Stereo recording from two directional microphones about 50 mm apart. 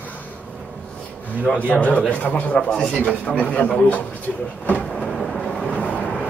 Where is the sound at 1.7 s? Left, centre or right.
Left.